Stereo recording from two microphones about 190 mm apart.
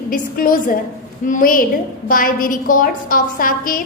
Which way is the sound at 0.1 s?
45° left (ahead or behind).